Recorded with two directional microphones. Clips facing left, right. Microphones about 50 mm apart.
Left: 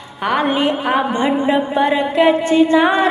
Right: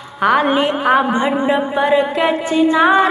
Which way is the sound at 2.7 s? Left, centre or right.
Centre.